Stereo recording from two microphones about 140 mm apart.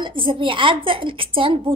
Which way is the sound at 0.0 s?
40° right (ahead or behind).